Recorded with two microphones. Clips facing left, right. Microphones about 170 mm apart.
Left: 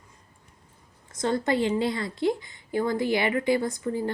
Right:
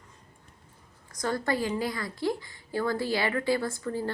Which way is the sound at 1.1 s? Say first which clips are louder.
Left 4 dB; 25° left (ahead or behind).